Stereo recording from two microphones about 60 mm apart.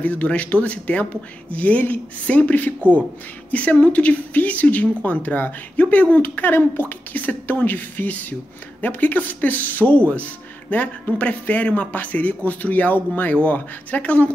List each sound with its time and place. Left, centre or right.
0.0 s speech: left